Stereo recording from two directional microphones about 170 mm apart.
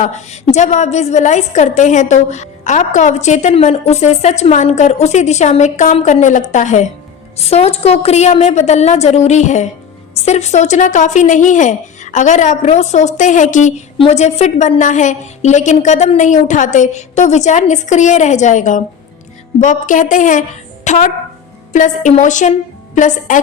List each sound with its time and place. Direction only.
0.0 s a woman's voice: 40° left (ahead or behind)
20.8 s music: 45° left (ahead or behind)
21.7 s a woman's voice: 45° left (ahead or behind)